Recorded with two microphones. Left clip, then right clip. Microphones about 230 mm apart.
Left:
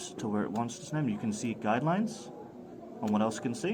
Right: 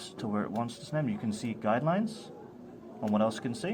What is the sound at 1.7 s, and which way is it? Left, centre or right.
Speech, centre.